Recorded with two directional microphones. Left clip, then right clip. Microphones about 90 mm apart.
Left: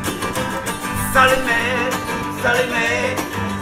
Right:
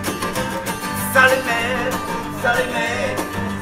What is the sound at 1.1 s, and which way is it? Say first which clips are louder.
Music: even; 25° left (ahead or behind).